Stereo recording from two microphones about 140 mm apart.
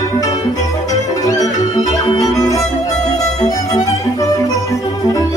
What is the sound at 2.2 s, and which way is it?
Violin, 25° left (ahead or behind).